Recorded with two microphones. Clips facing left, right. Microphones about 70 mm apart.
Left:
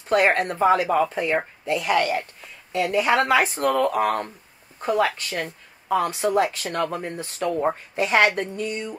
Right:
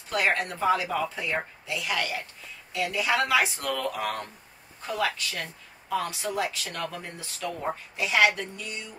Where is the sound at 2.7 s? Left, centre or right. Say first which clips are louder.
Left 7 dB; left.